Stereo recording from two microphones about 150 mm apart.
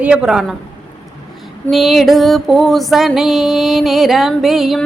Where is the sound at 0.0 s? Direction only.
5° right (ahead or behind).